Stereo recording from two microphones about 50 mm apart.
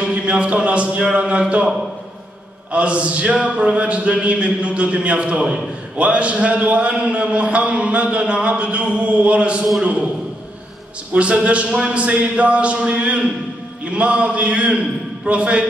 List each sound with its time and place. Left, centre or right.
0.0 s a man's voice: right
2.7 s a man's voice: right
11.1 s a man's voice: right